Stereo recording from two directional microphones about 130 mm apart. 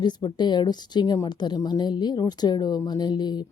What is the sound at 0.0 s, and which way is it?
A woman's voice, 35° left (ahead or behind).